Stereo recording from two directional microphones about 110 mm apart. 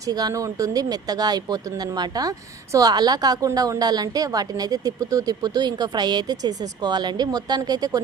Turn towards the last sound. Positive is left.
turn(degrees=-35)  # may be behind; listen again after turning